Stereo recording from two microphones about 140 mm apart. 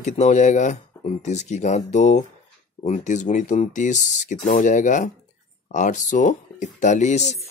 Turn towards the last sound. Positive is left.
turn(degrees=55)  # may be behind; listen again after turning